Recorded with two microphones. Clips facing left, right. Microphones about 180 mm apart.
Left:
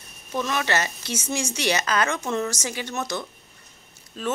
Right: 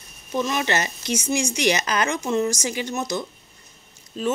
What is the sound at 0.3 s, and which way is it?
A woman's voice, 15° right (ahead or behind).